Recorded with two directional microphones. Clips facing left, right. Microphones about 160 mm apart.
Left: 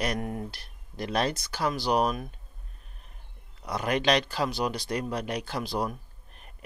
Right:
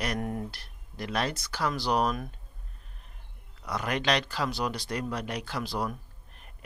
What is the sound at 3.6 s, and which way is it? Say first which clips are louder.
Speech: left 3 dB; 20° left (ahead or behind).